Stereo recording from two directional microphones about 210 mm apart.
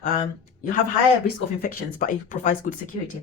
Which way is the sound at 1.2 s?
45° left (ahead or behind).